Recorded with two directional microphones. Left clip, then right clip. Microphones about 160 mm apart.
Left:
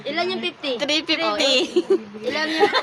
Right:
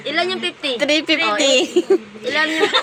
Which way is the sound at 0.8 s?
20° right (ahead or behind).